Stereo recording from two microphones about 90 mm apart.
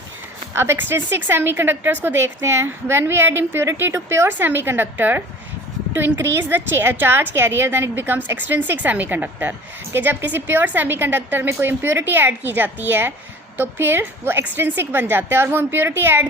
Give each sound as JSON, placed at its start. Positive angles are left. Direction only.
{"t": 0.5, "sound": "a woman's voice", "side_deg": -25}